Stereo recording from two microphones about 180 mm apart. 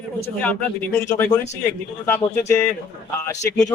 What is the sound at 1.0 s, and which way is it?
Speech, 15° left (ahead or behind).